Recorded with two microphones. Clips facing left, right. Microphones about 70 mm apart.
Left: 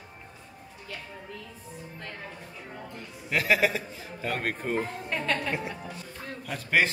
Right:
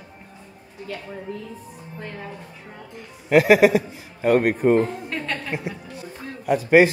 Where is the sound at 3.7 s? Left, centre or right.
Right.